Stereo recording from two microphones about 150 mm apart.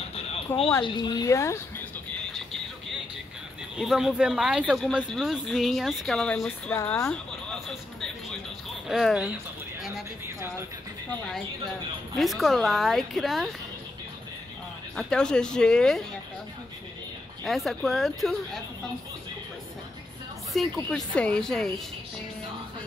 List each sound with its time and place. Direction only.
0.7 s speech: 30° left (ahead or behind)
3.7 s speech: 5° right (ahead or behind)
8.8 s speech: centre (ahead or behind)
12.2 s speech: centre (ahead or behind)
15.0 s speech: 5° left (ahead or behind)
17.5 s speech: centre (ahead or behind)
20.5 s speech: centre (ahead or behind)